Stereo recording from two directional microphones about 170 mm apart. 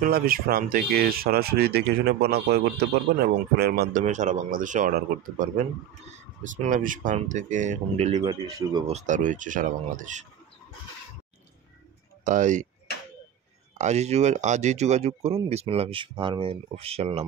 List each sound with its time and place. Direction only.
0.0 s speech: 60° right (ahead or behind)
4.0 s speech: 45° right (ahead or behind)
6.4 s speech: 50° right (ahead or behind)
8.2 s speech: 20° right (ahead or behind)
8.8 s speech: 45° right (ahead or behind)
12.3 s speech: 45° right (ahead or behind)
13.7 s speech: 40° right (ahead or behind)